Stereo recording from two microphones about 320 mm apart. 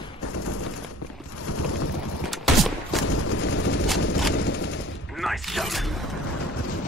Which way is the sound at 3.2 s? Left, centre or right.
Left.